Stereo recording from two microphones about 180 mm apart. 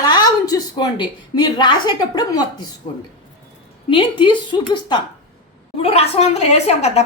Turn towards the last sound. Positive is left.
turn(degrees=35)  # may be behind; listen again after turning